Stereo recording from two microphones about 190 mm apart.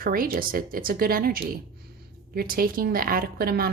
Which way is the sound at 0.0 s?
50° right (ahead or behind).